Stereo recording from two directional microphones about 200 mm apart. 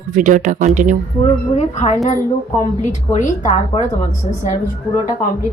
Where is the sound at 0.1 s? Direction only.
40° right (ahead or behind).